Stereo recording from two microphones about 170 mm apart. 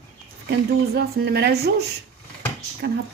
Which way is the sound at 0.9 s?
70° right (ahead or behind).